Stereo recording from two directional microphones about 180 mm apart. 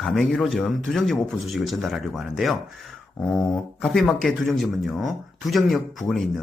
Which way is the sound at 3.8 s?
5° left (ahead or behind).